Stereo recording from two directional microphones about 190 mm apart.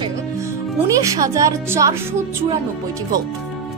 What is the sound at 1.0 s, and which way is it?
Speech, 15° right (ahead or behind).